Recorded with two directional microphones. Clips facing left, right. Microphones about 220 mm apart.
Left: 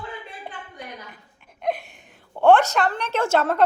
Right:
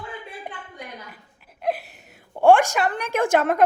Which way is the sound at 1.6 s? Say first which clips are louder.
Even; 5° right (ahead or behind).